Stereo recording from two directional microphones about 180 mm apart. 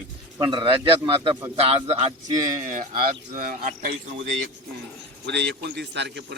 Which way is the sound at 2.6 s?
45° right (ahead or behind).